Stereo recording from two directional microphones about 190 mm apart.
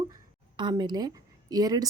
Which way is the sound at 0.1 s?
25° right (ahead or behind).